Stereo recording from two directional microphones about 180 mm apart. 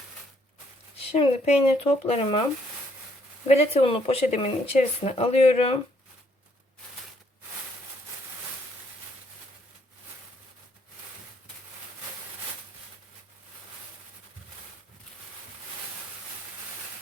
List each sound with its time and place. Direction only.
0.9 s speech: 35° left (ahead or behind)
3.4 s speech: 35° left (ahead or behind)